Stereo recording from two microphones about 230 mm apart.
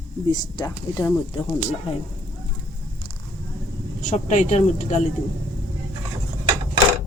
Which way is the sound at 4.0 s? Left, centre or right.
Left.